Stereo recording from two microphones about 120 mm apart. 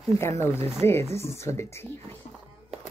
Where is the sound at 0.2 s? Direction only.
20° left (ahead or behind).